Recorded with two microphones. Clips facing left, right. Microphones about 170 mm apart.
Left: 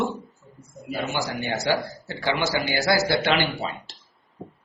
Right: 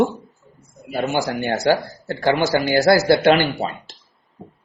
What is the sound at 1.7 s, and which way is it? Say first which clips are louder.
Speech: right 7 dB; 50° right (ahead or behind).